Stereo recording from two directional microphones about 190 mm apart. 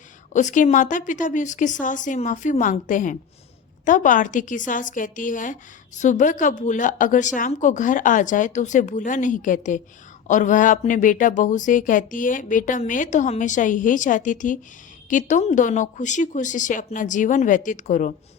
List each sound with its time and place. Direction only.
0.3 s a woman's voice: 40° left (ahead or behind)